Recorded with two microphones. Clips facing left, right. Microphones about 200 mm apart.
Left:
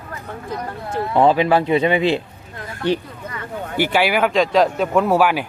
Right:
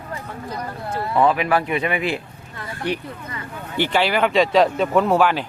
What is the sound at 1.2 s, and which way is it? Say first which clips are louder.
Speech: left 4 dB; 30° left (ahead or behind).